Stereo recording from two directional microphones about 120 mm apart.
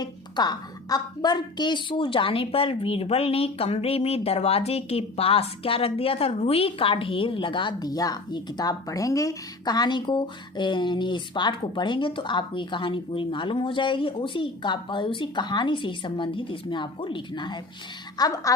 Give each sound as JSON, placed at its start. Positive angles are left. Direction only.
{"t": 0.0, "sound": "a woman's voice", "side_deg": 35}